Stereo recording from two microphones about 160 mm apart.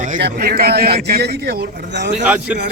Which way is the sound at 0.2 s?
85° right.